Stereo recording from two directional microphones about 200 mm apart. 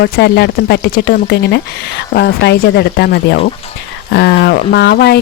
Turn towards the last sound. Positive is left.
turn(degrees=55)  # may be behind; listen again after turning